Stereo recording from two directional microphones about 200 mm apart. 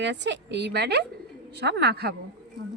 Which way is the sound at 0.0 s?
60° right (ahead or behind).